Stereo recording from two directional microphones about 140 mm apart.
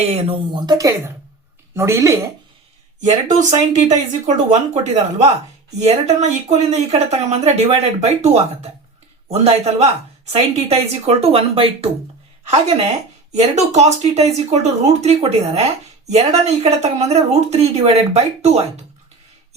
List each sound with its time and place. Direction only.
0.1 s speech: 45° right (ahead or behind)
0.6 s speech: 25° right (ahead or behind)
3.0 s speech: 60° right (ahead or behind); by 11.9 s 40° right (ahead or behind)
13.3 s speech: 50° right (ahead or behind)